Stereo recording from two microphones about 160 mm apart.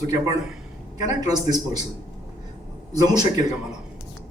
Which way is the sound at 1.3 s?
25° right (ahead or behind).